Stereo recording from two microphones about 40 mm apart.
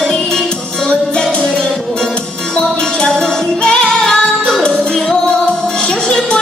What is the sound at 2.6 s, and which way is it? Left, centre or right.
Music, left.